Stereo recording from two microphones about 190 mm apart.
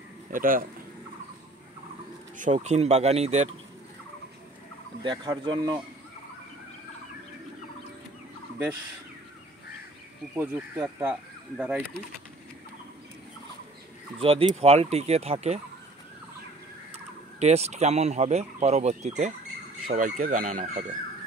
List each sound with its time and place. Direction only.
0.3 s speech: 45° right (ahead or behind)
2.3 s speech: 40° right (ahead or behind)
5.0 s speech: 25° right (ahead or behind)
10.3 s speech: 10° right (ahead or behind)
14.2 s speech: 30° right (ahead or behind)
17.4 s speech: 35° right (ahead or behind)